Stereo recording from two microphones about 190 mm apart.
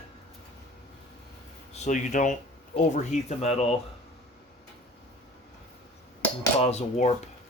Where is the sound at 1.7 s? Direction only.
40° left (ahead or behind).